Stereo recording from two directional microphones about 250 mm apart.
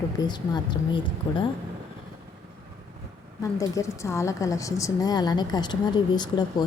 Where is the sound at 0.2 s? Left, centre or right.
Centre.